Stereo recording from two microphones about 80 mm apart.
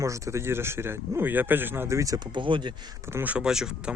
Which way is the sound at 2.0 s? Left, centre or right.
Right.